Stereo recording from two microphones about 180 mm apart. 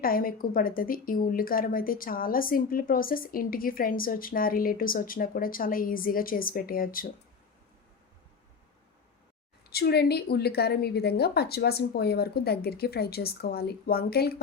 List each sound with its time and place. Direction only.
0.0 s speech: 55° left (ahead or behind)
9.6 s a woman's voice: 60° left (ahead or behind)